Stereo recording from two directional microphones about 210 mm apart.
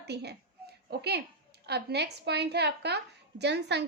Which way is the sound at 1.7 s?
50° right (ahead or behind).